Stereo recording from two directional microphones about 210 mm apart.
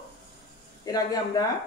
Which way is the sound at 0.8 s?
15° left (ahead or behind).